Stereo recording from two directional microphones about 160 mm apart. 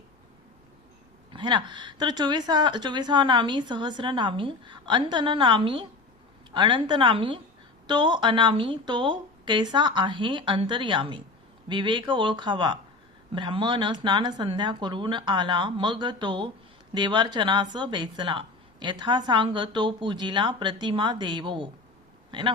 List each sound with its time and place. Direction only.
1.3 s a woman's voice: 30° right (ahead or behind)